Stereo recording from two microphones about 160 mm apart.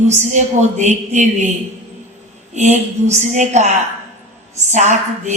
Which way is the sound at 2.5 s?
45° right (ahead or behind).